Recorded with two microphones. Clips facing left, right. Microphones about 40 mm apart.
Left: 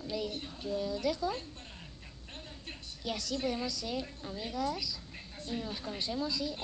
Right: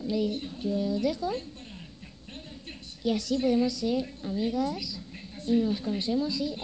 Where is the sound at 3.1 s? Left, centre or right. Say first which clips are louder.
Right 7 dB; right.